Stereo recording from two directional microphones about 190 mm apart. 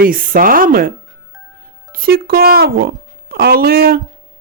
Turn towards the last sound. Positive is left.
turn(degrees=-50)  # may be behind; listen again after turning